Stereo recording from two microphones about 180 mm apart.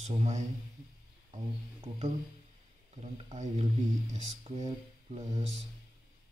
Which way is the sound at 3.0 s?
40° right (ahead or behind).